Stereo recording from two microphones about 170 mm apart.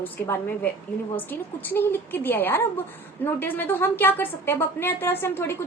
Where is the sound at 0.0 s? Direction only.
10° left (ahead or behind).